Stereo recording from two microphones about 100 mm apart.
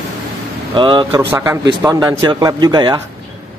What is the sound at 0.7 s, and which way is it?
Speech, 50° right (ahead or behind).